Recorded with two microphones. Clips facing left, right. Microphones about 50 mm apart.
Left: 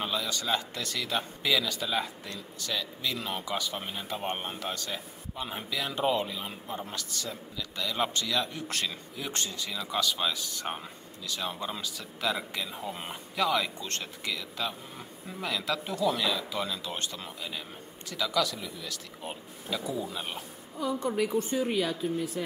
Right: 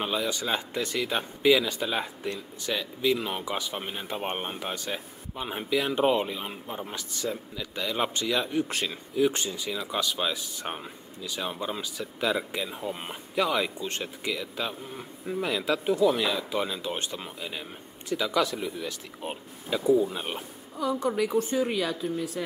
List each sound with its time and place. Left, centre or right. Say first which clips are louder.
0.0 s speech: right 3 dB; centre
21.0 s a woman's voice: right 2 dB; right